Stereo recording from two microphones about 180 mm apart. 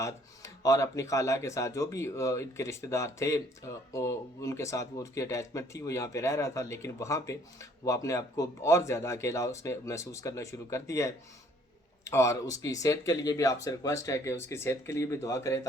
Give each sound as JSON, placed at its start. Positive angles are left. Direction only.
{"t": 0.0, "sound": "speech", "side_deg": 15}